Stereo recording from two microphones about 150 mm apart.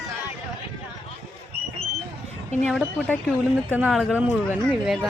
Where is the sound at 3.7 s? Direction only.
10° right (ahead or behind).